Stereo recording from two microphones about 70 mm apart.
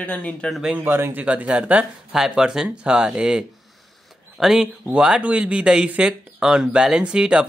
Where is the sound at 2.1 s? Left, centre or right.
Centre.